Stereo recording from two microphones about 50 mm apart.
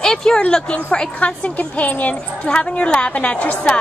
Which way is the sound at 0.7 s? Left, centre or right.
Left.